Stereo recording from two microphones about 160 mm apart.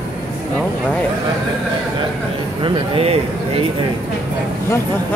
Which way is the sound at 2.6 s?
30° right (ahead or behind).